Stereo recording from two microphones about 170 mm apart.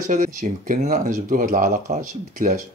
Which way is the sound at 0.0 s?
55° right (ahead or behind).